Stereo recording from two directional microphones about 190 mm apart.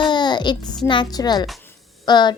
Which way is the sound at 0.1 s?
25° left (ahead or behind).